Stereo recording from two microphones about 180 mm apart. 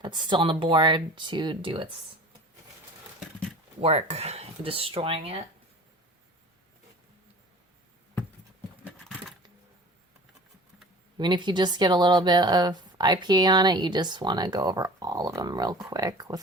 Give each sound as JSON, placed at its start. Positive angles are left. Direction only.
{"t": 0.0, "sound": "speech", "side_deg": -25}
{"t": 3.8, "sound": "speech", "side_deg": -35}
{"t": 8.8, "sound": "a sound", "side_deg": -5}
{"t": 11.2, "sound": "speech", "side_deg": -25}